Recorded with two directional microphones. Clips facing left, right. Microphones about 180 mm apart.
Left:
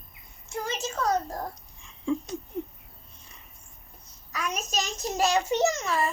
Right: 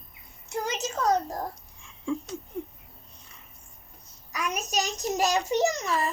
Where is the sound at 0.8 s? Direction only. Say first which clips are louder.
Right 2 dB; 40° right (ahead or behind).